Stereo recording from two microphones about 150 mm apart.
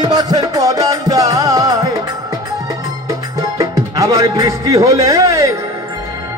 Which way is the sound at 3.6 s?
25° right (ahead or behind).